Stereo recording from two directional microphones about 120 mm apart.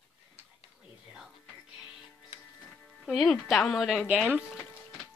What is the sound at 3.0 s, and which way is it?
A woman's voice, 5° left (ahead or behind).